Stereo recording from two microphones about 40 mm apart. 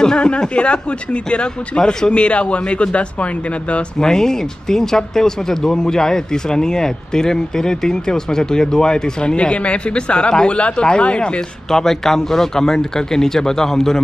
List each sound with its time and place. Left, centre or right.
0.0 s speech: left
4.0 s speech: centre
11.7 s speech: centre